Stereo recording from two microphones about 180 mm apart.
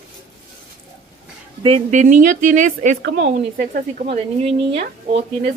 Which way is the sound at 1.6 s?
40° right (ahead or behind).